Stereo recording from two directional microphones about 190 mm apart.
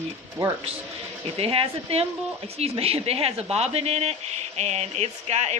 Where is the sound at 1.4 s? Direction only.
30° right (ahead or behind).